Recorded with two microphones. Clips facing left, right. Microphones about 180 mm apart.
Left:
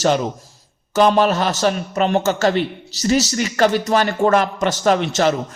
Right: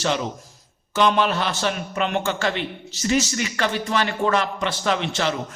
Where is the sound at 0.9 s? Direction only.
40° left (ahead or behind).